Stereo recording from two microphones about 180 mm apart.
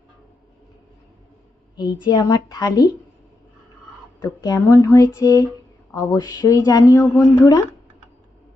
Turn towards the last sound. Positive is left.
turn(degrees=15)  # may be behind; listen again after turning